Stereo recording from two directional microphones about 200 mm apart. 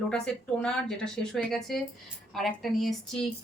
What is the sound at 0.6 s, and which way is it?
A woman's voice, 5° left (ahead or behind).